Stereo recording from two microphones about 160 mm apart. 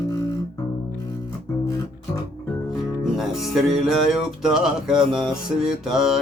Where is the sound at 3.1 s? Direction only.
Centre (ahead or behind).